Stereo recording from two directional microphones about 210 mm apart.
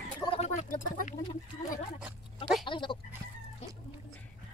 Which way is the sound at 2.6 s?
25° left (ahead or behind).